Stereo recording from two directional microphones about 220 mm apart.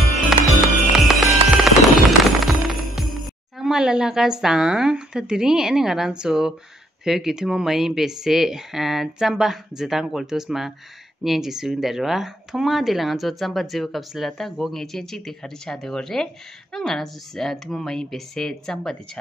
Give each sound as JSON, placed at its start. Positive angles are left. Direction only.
{"t": 0.9, "sound": "music", "side_deg": 0}
{"t": 7.1, "sound": "speech", "side_deg": 0}